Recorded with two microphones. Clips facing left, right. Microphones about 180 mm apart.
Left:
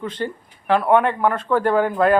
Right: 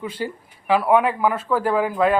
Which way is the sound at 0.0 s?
10° right (ahead or behind).